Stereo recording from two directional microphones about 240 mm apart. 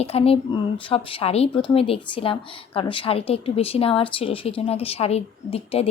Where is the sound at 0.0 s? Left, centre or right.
Left.